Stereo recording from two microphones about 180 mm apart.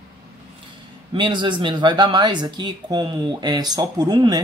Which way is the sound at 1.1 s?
25° right (ahead or behind).